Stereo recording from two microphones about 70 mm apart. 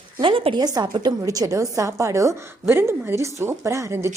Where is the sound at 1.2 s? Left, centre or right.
Right.